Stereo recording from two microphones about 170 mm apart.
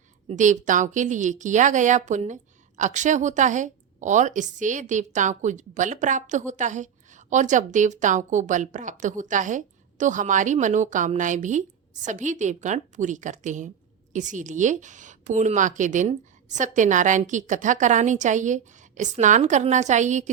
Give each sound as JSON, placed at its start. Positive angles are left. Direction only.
{"t": 0.3, "sound": "a woman's voice", "side_deg": -45}